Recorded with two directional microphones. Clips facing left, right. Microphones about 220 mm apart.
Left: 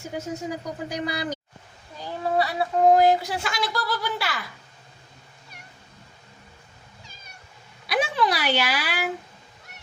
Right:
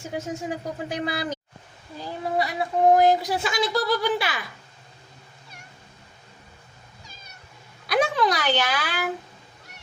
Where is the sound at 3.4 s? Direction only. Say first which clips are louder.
Right 4 dB; 20° right (ahead or behind).